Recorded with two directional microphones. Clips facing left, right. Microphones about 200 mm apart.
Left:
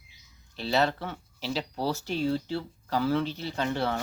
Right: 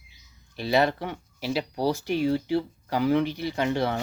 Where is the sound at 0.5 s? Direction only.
15° right (ahead or behind).